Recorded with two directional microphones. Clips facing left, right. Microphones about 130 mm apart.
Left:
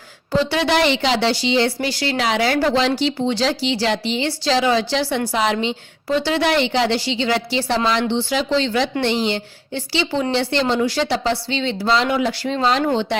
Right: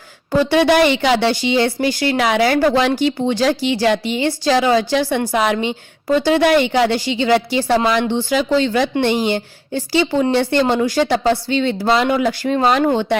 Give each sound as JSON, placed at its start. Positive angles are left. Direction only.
{"t": 0.3, "sound": "speech", "side_deg": -50}